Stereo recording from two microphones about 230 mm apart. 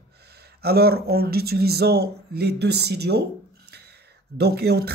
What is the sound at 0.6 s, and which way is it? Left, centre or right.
Speech, right.